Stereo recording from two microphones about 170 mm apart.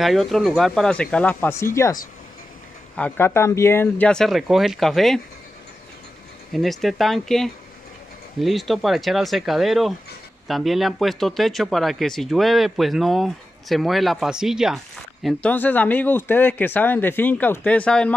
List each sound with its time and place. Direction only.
0.0 s speech: centre (ahead or behind); by 2.0 s 15° left (ahead or behind)
3.0 s speech: 15° left (ahead or behind)
6.5 s speech: centre (ahead or behind)
15.2 s speech: 10° left (ahead or behind)